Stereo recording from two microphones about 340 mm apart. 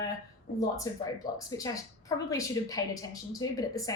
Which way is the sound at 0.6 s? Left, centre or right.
Centre.